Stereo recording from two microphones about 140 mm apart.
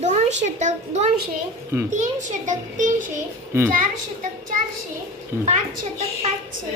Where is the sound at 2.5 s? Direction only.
65° right (ahead or behind).